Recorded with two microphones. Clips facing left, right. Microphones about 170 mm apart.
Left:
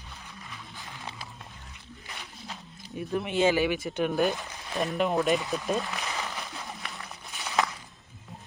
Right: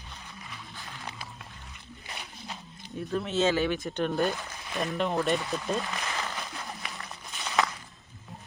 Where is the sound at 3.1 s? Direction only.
15° left (ahead or behind).